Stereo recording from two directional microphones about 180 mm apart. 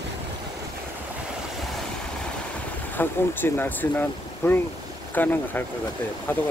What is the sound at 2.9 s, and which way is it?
Speech, 10° left (ahead or behind).